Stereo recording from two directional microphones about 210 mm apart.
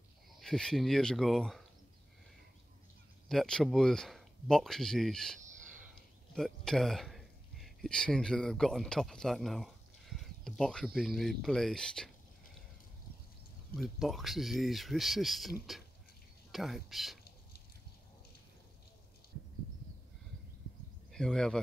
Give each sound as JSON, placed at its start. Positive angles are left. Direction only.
{"t": 0.4, "sound": "speech", "side_deg": 5}
{"t": 3.3, "sound": "speech", "side_deg": 0}
{"t": 13.7, "sound": "speech", "side_deg": 0}
{"t": 16.5, "sound": "speech", "side_deg": 0}
{"t": 21.1, "sound": "speech", "side_deg": 5}